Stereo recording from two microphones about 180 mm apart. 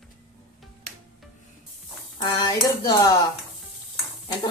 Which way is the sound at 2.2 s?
20° left (ahead or behind).